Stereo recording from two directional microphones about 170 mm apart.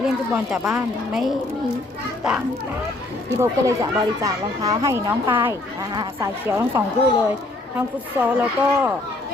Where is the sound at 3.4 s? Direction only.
20° right (ahead or behind).